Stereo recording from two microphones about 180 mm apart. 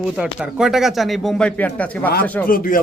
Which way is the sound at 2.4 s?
50° left (ahead or behind).